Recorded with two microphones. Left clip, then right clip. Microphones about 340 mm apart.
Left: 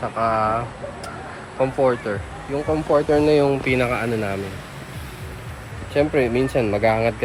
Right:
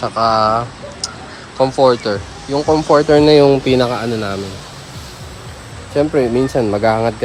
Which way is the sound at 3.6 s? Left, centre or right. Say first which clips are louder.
Right 6 dB; centre.